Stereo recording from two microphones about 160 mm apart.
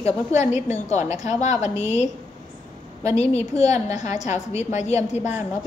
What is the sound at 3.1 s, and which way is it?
A woman's voice, 45° left (ahead or behind).